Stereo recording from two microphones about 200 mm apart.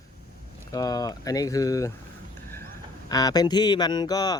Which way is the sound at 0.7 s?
20° left (ahead or behind).